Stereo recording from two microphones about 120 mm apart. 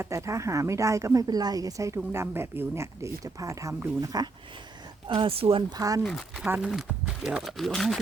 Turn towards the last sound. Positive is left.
turn(degrees=0)  # may be behind; listen again after turning